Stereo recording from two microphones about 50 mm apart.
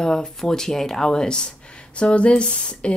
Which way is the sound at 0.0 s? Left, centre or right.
Centre.